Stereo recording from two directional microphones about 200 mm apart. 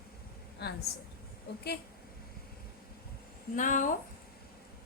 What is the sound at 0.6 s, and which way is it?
Speech, 55° left (ahead or behind).